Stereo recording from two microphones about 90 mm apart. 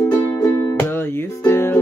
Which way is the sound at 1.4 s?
25° left (ahead or behind).